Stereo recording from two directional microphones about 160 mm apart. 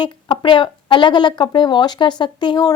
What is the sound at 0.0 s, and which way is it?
Speech, 30° left (ahead or behind).